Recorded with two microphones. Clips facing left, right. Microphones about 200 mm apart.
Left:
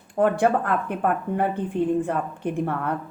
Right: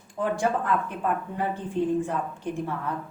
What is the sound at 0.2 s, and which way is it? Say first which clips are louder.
Speech: left 6 dB; 60° left (ahead or behind).